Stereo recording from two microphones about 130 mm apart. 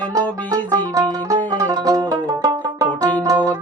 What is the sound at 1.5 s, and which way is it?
Banjo, 30° right (ahead or behind).